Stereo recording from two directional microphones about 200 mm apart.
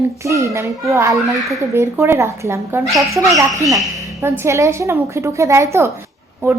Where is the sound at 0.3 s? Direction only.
15° right (ahead or behind).